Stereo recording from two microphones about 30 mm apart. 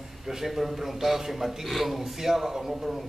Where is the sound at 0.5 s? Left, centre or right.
Centre.